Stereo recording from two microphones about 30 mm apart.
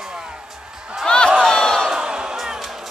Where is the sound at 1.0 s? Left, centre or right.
Left.